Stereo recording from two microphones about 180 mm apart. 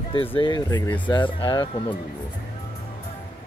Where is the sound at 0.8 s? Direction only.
10° left (ahead or behind).